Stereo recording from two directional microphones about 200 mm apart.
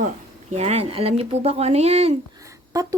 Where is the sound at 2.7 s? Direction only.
15° right (ahead or behind).